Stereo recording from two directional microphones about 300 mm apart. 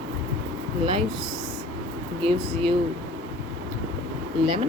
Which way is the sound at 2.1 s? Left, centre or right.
Centre.